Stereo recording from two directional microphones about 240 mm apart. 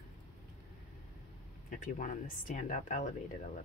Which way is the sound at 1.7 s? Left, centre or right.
Left.